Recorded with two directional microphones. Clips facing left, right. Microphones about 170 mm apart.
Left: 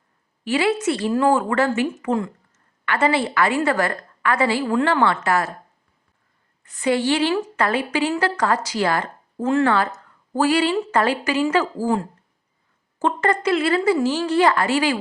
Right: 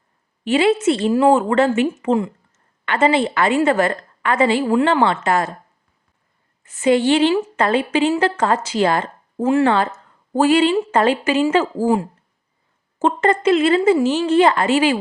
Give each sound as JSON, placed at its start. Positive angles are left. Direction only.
{"t": 0.4, "sound": "a woman's voice", "side_deg": -25}
{"t": 6.7, "sound": "a woman's voice", "side_deg": -20}
{"t": 9.4, "sound": "speech", "side_deg": -10}
{"t": 9.6, "sound": "a woman's voice", "side_deg": -25}
{"t": 13.0, "sound": "a woman's voice", "side_deg": -25}